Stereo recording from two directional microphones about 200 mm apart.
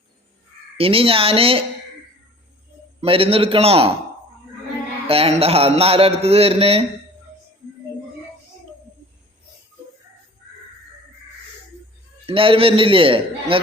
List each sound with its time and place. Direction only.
0.8 s speech: 30° right (ahead or behind)
3.0 s speech: 30° right (ahead or behind)
5.0 s speech: 30° right (ahead or behind)
12.2 s speech: 25° right (ahead or behind)